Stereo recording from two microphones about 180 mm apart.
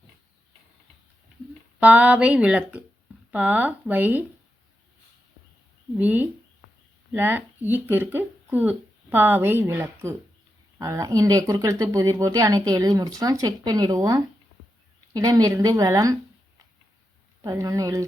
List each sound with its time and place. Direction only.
1.8 s speech: 10° right (ahead or behind)
6.0 s speech: 10° right (ahead or behind)
17.4 s speech: 20° right (ahead or behind)